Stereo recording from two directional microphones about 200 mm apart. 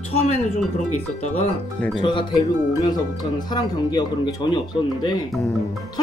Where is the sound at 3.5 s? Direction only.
20° left (ahead or behind).